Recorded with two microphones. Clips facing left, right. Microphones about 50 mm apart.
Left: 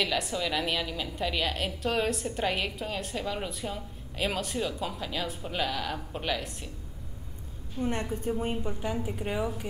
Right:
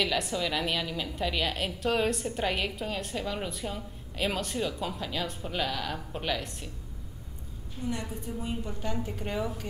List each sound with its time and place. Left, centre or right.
0.0 s a woman's voice: centre
7.8 s a woman's voice: left
8.6 s a woman's voice: centre